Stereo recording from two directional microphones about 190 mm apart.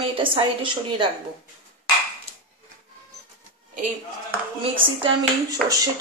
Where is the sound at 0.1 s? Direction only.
25° right (ahead or behind).